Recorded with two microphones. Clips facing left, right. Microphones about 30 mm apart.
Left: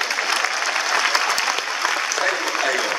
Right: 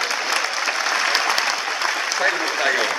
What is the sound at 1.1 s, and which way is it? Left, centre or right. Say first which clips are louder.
Applause: even; right.